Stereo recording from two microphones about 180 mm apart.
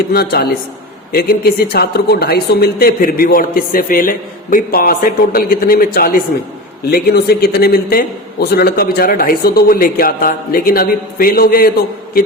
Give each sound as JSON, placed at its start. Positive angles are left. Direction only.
{"t": 0.1, "sound": "a man's voice", "side_deg": 60}